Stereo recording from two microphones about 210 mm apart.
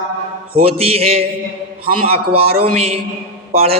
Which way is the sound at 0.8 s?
30° right (ahead or behind).